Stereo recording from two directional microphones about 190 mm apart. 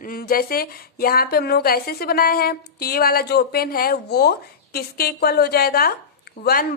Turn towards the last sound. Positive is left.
turn(degrees=50)  # may be behind; listen again after turning